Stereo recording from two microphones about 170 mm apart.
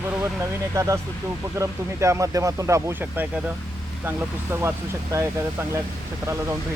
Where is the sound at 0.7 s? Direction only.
15° right (ahead or behind).